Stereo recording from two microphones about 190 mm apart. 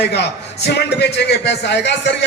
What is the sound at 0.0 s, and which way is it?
A man's voice, 65° left (ahead or behind).